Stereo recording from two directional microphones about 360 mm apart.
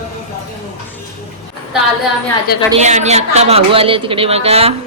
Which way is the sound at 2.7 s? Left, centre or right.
Centre.